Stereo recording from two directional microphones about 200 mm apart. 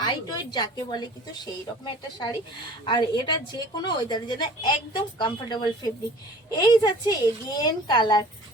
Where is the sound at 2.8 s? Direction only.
20° left (ahead or behind).